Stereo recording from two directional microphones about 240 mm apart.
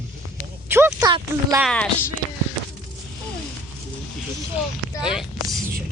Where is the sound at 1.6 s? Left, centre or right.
Centre.